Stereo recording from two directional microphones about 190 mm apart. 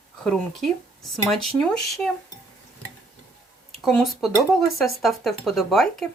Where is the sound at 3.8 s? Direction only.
Centre (ahead or behind).